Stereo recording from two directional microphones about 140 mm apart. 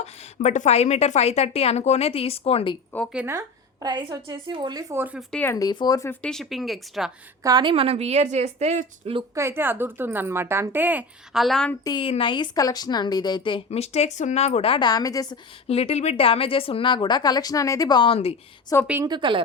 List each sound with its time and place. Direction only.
0.0 s a woman's voice: 55° left (ahead or behind)
3.2 s a woman's voice: 25° right (ahead or behind)
5.3 s speech: 10° left (ahead or behind)
5.5 s speech: 30° left (ahead or behind)
6.1 s speech: 5° left (ahead or behind)
7.4 s a woman's voice: 30° right (ahead or behind); by 9.1 s 55° right (ahead or behind)
9.3 s a woman's voice: 20° right (ahead or behind)
11.3 s speech: centre (ahead or behind)
11.9 s speech: 35° left (ahead or behind)
13.7 s a woman's voice: 50° left (ahead or behind); by 15.4 s 25° left (ahead or behind)
15.6 s speech: 45° left (ahead or behind)
18.7 s speech: 20° left (ahead or behind)
19.0 s speech: 35° right (ahead or behind)